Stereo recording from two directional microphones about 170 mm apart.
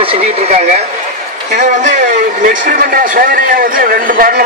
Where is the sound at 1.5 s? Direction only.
45° right (ahead or behind).